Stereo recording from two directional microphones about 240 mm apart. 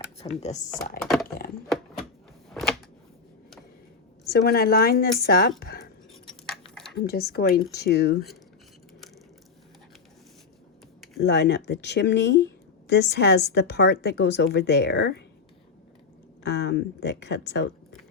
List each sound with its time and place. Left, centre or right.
0.2 s speech: left
1.0 s typing: centre
2.5 s a sound: centre
4.3 s speech: left
6.9 s speech: left
11.2 s a woman's voice: left
16.4 s a woman's voice: left